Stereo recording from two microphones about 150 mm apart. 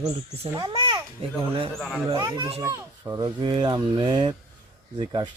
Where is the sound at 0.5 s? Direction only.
25° right (ahead or behind).